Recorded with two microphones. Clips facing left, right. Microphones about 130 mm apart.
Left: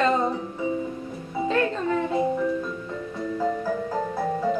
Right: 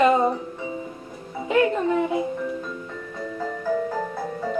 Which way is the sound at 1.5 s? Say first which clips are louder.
Right 4 dB; 15° right (ahead or behind).